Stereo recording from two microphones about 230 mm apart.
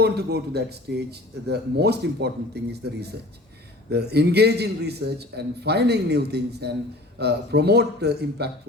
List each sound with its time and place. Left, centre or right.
0.0 s speech: right